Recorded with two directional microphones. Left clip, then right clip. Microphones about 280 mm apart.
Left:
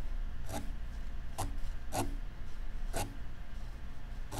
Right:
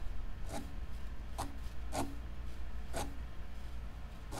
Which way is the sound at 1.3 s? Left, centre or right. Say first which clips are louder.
Left 2 dB; centre.